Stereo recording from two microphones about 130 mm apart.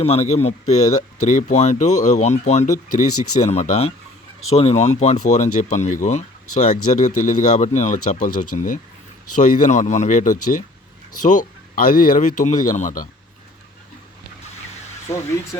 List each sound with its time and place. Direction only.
0.0 s speech: 55° left (ahead or behind)
1.2 s speech: 75° left (ahead or behind)